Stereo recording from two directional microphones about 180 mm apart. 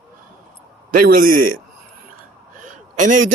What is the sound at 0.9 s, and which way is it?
Speech, 55° right (ahead or behind).